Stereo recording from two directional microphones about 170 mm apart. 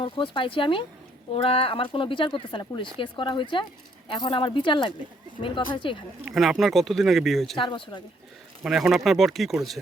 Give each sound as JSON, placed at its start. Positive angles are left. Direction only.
{"t": 0.0, "sound": "speech", "side_deg": 30}
{"t": 6.3, "sound": "speech", "side_deg": 0}
{"t": 7.5, "sound": "speech", "side_deg": 30}
{"t": 8.6, "sound": "speech", "side_deg": 0}